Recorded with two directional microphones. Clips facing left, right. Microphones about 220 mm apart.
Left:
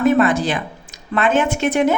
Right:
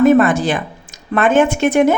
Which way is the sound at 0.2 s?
50° right (ahead or behind).